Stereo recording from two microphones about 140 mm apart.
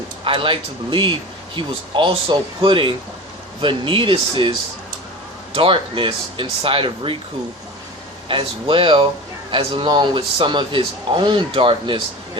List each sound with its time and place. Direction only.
0.3 s speech: 40° right (ahead or behind)
5.5 s speech: 40° right (ahead or behind)
8.3 s speech: 40° right (ahead or behind)